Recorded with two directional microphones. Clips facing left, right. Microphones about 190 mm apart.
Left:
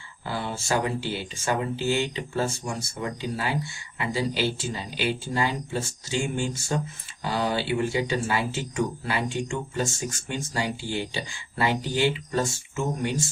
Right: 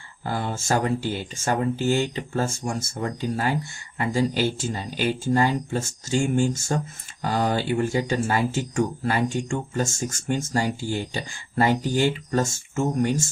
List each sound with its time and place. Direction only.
0.3 s speech: 45° right (ahead or behind)